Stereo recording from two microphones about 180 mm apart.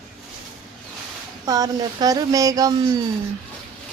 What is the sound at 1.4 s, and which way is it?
Speech, 20° right (ahead or behind).